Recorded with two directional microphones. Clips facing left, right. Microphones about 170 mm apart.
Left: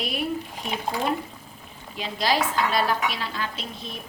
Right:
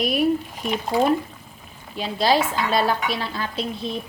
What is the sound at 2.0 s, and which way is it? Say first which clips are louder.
Speech: right 4 dB; 30° right (ahead or behind).